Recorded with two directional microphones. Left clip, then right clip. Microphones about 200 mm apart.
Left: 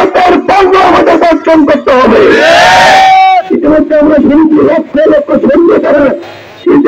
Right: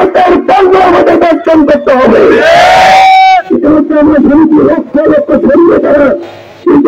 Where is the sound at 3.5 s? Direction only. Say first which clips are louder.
Right 1 dB; 40° right (ahead or behind).